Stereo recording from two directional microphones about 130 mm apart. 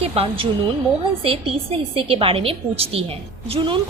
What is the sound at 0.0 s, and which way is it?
A woman's voice, 50° right (ahead or behind).